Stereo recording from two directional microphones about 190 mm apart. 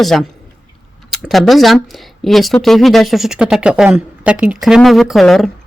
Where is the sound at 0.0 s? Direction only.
Centre (ahead or behind).